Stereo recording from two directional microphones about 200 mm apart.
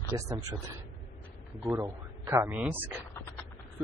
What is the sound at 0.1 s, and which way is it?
Speech, 15° right (ahead or behind).